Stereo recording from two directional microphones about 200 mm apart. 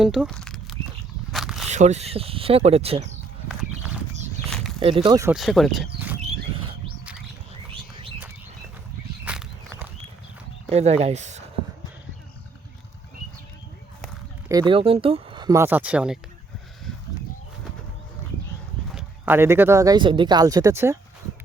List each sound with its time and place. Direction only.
0.0 s a sound: centre (ahead or behind)
1.3 s walk: centre (ahead or behind)
1.6 s speech: 35° right (ahead or behind)
3.5 s clip-clop: 5° right (ahead or behind)
4.4 s a sound: centre (ahead or behind)
4.8 s speech: 25° right (ahead or behind)
5.3 s speech: centre (ahead or behind)
9.2 s walk: 5° right (ahead or behind)
10.7 s speech: 30° right (ahead or behind)
14.5 s speech: 25° right (ahead or behind); by 16.1 s 5° right (ahead or behind)
18.9 s speech: 5° right (ahead or behind)